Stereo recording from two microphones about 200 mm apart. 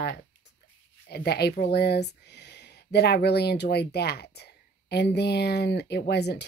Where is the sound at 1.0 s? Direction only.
55° left (ahead or behind).